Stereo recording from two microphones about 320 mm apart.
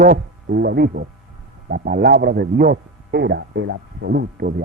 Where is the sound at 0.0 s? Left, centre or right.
Right.